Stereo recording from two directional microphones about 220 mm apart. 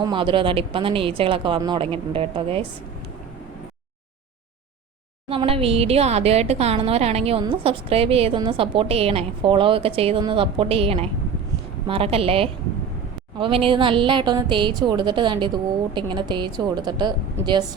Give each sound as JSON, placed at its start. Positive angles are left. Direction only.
{"t": 0.0, "sound": "a woman's voice", "side_deg": -20}
{"t": 5.3, "sound": "a woman's voice", "side_deg": -25}